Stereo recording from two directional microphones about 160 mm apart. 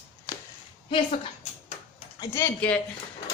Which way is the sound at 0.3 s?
25° left (ahead or behind).